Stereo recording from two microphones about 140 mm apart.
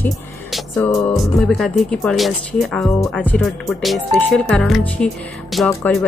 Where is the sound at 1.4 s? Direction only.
5° left (ahead or behind).